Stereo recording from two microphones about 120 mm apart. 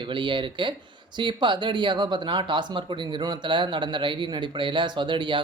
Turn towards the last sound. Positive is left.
turn(degrees=-40)  # may be behind; listen again after turning